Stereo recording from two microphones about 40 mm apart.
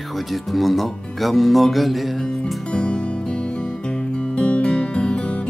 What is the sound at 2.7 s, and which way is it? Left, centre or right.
Music, left.